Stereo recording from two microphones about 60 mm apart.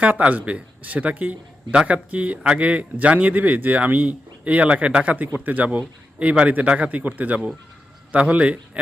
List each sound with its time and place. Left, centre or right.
0.0 s a man's voice: right